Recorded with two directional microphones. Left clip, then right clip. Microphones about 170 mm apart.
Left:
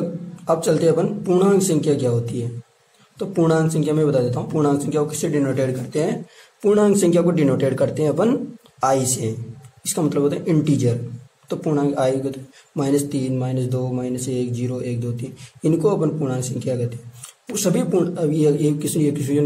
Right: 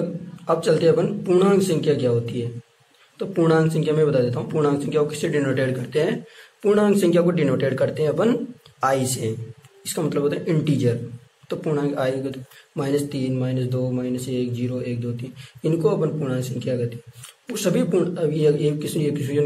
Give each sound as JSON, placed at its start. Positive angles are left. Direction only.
{"t": 0.5, "sound": "speech", "side_deg": 15}